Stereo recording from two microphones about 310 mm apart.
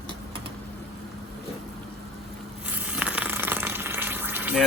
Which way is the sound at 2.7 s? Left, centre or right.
Centre.